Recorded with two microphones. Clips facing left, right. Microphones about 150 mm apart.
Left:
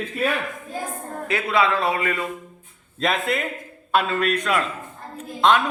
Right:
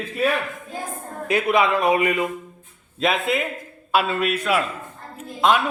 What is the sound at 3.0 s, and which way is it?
A man's voice, centre (ahead or behind).